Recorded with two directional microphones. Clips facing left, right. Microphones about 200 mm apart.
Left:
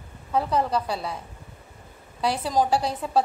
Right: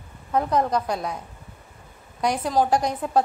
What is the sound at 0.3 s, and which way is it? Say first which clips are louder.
Speech: right 2 dB; 5° left (ahead or behind).